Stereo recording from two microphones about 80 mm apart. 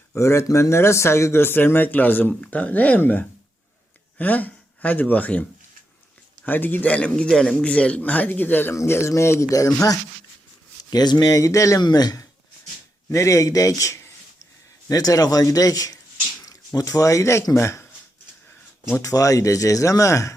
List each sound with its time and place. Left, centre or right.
0.2 s a man's voice: left
8.7 s speech: left
10.8 s speech: left
11.3 s speech: left
11.8 s speech: left
13.1 s speech: left
18.9 s speech: left